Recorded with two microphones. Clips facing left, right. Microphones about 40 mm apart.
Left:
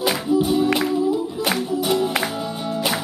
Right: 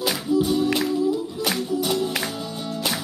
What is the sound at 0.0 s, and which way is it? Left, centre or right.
Music, centre.